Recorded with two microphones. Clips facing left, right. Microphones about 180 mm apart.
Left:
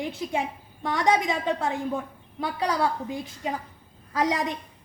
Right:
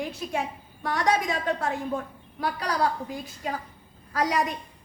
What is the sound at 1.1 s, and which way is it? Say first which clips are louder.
Speech: left 2 dB; 90° left.